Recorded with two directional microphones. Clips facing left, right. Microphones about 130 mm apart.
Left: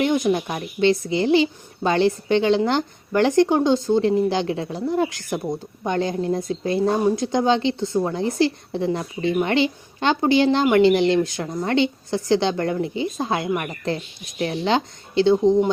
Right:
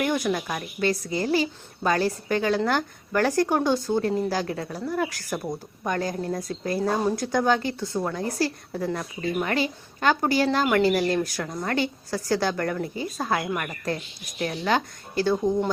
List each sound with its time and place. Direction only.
0.0 s a woman's voice: 20° left (ahead or behind)